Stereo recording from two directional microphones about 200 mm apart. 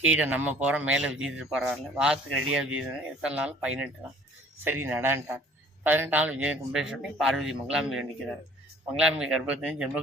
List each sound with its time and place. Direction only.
0.0 s speech: 10° right (ahead or behind)